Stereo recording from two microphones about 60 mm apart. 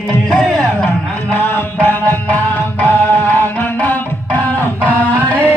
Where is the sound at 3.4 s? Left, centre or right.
Left.